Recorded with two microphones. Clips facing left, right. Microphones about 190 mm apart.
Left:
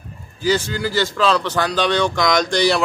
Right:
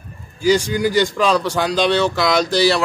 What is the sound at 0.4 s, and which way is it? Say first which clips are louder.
Speech: right 4 dB; 10° right (ahead or behind).